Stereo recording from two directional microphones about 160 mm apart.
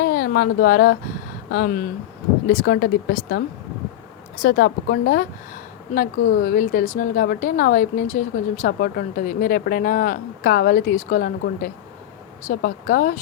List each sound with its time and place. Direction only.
0.0 s a woman's voice: 70° left (ahead or behind)
4.4 s a woman's voice: 80° left
5.9 s a woman's voice: 60° left (ahead or behind)